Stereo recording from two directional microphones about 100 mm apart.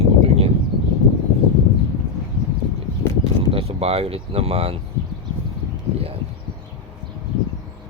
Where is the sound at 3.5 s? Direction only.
75° right (ahead or behind).